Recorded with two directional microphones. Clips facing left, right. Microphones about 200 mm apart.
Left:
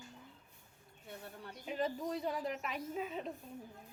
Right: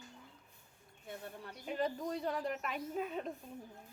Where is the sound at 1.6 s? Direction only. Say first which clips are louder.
Right 1 dB; centre (ahead or behind).